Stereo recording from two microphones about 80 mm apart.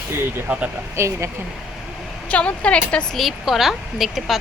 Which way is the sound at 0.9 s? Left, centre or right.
Right.